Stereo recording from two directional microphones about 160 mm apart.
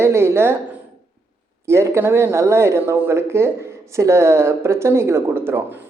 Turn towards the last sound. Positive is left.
turn(degrees=-15)  # may be behind; listen again after turning